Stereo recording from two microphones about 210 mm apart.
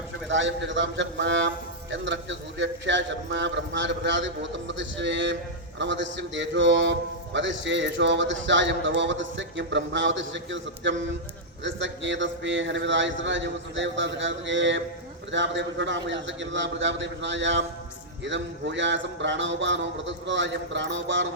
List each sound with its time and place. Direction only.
0.3 s a man's voice: 60° right (ahead or behind)